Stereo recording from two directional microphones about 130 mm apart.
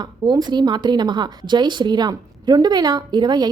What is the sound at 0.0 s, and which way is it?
A woman's voice, 30° right (ahead or behind).